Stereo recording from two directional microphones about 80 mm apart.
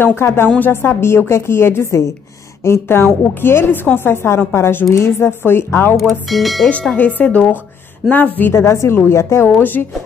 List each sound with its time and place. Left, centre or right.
0.0 s a woman's voice: left
5.9 s speech: centre
6.7 s a woman's voice: centre
8.5 s a woman's voice: left
9.6 s a woman's voice: left